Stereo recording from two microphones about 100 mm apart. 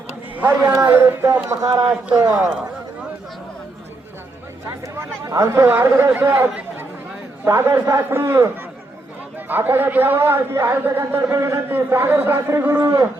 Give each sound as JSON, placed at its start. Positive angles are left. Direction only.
{"t": 0.3, "sound": "a man's voice", "side_deg": -15}
{"t": 1.6, "sound": "a man's voice", "side_deg": -35}
{"t": 2.2, "sound": "a man's voice", "side_deg": -10}
{"t": 4.9, "sound": "a man's voice", "side_deg": -30}
{"t": 9.5, "sound": "a man's voice", "side_deg": -20}